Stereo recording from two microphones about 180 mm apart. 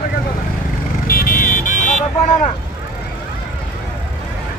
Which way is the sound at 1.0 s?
55° left (ahead or behind).